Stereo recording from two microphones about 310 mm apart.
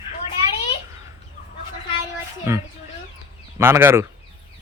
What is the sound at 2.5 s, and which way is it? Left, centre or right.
Speech, centre.